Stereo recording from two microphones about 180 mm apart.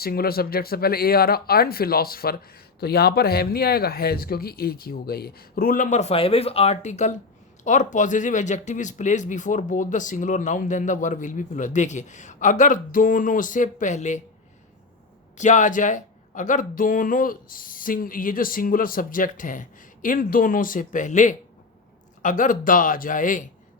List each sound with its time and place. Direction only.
0.0 s speech: 55° left (ahead or behind); by 14.2 s 40° left (ahead or behind)
15.4 s speech: 45° left (ahead or behind)